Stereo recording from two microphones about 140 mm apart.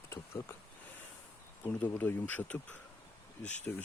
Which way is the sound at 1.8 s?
15° left (ahead or behind).